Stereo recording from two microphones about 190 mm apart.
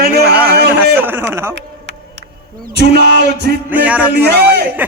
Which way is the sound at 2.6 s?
60° right (ahead or behind).